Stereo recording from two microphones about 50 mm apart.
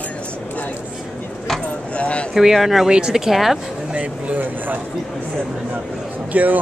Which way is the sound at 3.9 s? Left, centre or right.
Right.